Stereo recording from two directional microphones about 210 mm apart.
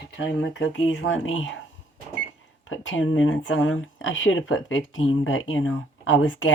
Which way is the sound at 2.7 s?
70° left (ahead or behind).